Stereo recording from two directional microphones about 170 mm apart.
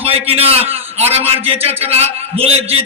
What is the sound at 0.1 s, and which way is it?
Speech, 35° right (ahead or behind).